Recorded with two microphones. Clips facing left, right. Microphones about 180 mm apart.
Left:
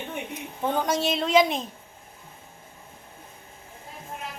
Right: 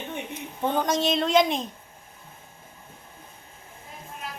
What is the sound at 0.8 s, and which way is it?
Speech, 5° left (ahead or behind).